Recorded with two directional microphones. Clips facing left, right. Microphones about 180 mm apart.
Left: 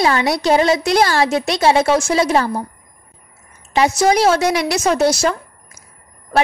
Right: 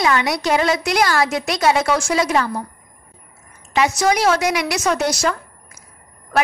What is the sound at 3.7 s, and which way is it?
A woman's voice, 30° left (ahead or behind).